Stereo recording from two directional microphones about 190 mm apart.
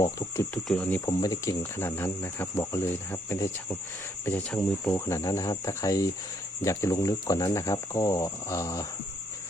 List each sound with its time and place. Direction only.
0.0 s speech: 15° left (ahead or behind)